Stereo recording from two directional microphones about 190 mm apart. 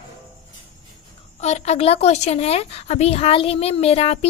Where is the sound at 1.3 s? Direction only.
35° left (ahead or behind).